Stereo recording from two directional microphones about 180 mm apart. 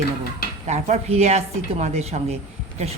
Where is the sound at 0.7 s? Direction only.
40° right (ahead or behind).